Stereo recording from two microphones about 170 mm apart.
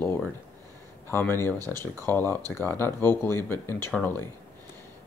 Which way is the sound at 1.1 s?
15° left (ahead or behind).